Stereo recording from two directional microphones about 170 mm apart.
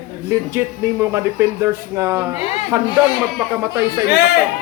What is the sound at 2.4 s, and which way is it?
Speech, 35° left (ahead or behind).